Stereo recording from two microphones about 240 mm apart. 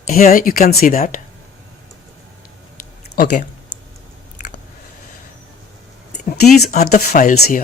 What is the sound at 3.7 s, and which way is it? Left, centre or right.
Typing, left.